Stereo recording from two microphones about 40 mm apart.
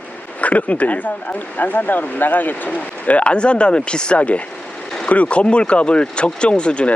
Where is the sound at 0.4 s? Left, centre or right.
Left.